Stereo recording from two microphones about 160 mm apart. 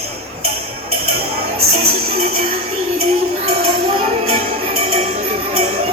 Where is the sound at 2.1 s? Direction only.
40° right (ahead or behind).